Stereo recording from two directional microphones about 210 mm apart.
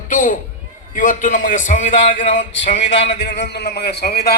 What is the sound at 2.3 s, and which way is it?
A man's voice, 60° left (ahead or behind).